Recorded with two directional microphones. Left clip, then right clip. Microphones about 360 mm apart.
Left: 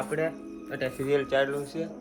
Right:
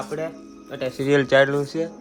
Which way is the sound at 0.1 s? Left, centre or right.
Centre.